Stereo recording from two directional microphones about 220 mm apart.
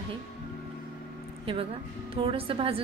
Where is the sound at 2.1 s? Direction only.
25° right (ahead or behind).